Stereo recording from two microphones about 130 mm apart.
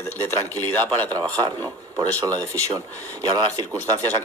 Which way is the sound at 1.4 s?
30° right (ahead or behind).